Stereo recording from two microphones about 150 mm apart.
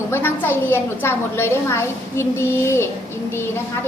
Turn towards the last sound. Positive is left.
turn(degrees=15)  # may be behind; listen again after turning